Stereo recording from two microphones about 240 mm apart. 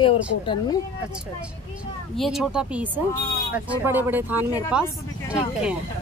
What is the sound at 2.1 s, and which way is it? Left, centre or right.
Speech, centre.